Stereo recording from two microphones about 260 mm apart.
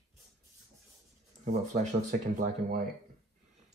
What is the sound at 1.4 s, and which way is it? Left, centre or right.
Speech, right.